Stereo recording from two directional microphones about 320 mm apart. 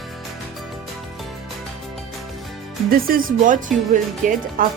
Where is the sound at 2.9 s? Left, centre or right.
Right.